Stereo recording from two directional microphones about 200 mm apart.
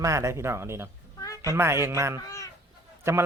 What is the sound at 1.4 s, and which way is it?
Speech, 15° right (ahead or behind).